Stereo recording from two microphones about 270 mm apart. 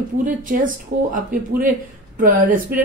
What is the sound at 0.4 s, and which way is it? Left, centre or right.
A woman's voice, right.